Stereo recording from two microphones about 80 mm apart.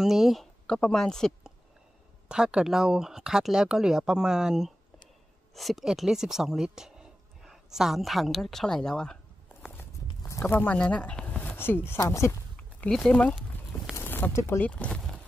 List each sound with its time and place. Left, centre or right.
0.0 s speech: centre
0.7 s a woman's voice: centre
2.2 s speech: centre
10.4 s speech: left
11.5 s speech: left
12.8 s a woman's voice: centre
13.1 s speech: centre
13.9 s a sound: left
14.6 s a woman's voice: centre
14.9 s a sound: centre